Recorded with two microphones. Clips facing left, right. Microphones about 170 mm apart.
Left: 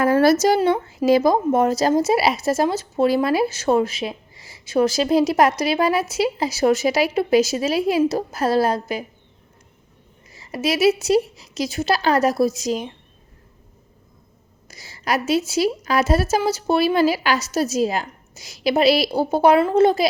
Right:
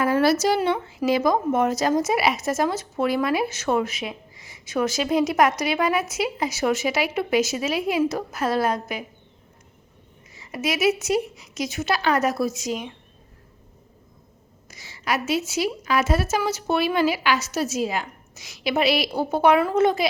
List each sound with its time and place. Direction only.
0.0 s speech: 45° left (ahead or behind)
10.3 s speech: 35° left (ahead or behind)
14.7 s a sound: 35° left (ahead or behind)
15.3 s speech: 35° left (ahead or behind)